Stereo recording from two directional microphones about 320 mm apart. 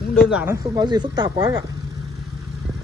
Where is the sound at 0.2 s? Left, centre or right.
Centre.